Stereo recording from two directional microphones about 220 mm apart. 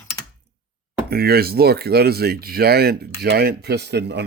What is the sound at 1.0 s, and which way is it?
Speech, 45° right (ahead or behind).